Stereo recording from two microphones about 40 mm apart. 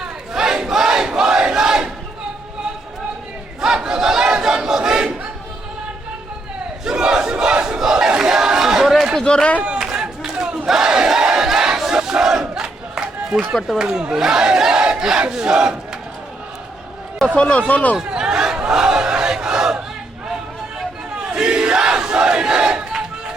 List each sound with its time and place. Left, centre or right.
0.3 s battle cry: centre
3.6 s battle cry: centre
6.8 s crowd: centre
9.2 s a sound: left
9.8 s battle cry: centre
11.3 s crowd: centre
13.9 s battle cry: centre
17.3 s speech: left
18.1 s battle cry: centre
21.2 s crowd: right